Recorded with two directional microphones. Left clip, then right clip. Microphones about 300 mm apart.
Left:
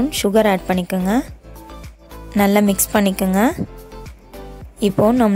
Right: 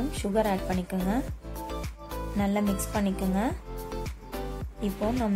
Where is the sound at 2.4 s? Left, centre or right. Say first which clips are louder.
Left 14 dB; left.